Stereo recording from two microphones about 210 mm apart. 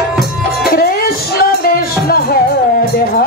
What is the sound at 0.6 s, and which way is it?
Music, 45° left (ahead or behind).